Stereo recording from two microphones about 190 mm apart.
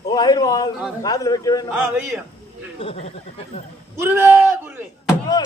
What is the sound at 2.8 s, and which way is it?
Speech, 30° left (ahead or behind).